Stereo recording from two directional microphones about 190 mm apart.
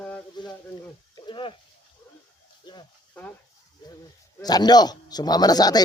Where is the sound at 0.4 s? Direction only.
25° left (ahead or behind).